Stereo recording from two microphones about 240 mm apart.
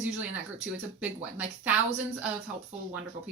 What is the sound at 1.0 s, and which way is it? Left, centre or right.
A woman's voice, centre.